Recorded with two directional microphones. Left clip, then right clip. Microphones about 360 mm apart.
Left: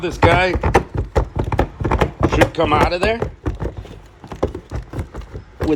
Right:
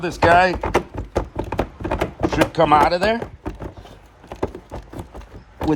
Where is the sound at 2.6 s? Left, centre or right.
Right.